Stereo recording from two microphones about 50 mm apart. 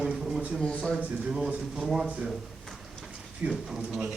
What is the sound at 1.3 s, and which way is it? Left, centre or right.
Speech, centre.